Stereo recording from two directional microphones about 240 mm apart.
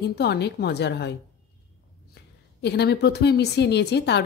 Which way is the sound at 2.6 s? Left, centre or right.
Left.